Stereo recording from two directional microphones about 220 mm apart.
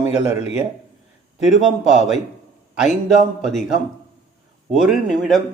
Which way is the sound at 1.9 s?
Centre (ahead or behind).